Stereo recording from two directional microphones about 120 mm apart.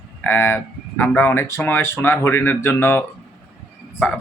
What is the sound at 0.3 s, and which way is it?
Speech, 15° left (ahead or behind).